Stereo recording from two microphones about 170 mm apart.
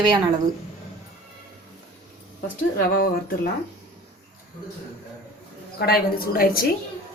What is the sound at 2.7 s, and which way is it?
Speech, 60° left (ahead or behind).